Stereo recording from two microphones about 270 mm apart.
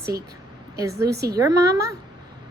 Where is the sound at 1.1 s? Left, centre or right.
Right.